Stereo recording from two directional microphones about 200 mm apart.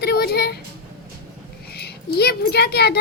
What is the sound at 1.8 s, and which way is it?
A child's voice, 55° left (ahead or behind).